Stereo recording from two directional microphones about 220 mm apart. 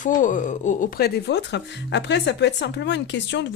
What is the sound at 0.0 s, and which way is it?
Speech, 35° left (ahead or behind).